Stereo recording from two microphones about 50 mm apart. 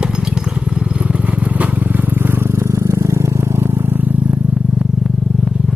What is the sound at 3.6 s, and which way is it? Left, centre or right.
Vehicle, right.